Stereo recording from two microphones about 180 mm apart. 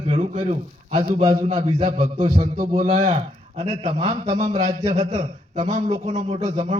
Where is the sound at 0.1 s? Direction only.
35° right (ahead or behind).